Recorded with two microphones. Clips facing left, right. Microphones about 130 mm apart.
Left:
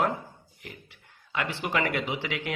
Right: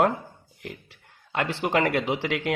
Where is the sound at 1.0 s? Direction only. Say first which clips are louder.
Right 4 dB; 50° right (ahead or behind).